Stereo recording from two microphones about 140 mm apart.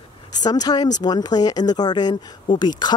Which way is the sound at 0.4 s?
30° left (ahead or behind).